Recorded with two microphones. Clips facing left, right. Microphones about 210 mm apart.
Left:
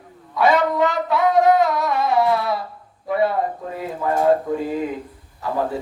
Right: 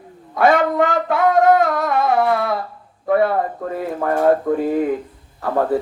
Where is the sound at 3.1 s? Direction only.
55° right (ahead or behind).